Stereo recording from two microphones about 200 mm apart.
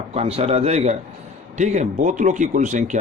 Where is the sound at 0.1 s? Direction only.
30° right (ahead or behind).